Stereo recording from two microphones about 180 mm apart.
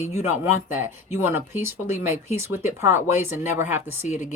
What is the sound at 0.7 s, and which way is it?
Speech, 10° right (ahead or behind).